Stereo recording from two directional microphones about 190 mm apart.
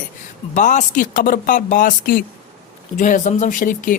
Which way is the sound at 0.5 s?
40° left (ahead or behind).